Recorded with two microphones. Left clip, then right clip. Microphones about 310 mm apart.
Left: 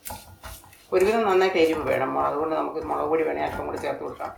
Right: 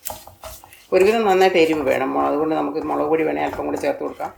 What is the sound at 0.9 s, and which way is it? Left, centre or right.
A man's voice, right.